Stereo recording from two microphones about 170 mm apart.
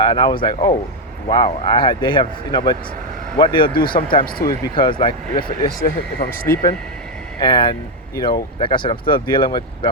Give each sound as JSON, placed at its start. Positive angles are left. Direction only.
{"t": 0.0, "sound": "speech", "side_deg": 25}
{"t": 5.5, "sound": "speech", "side_deg": 60}
{"t": 7.3, "sound": "speech", "side_deg": 25}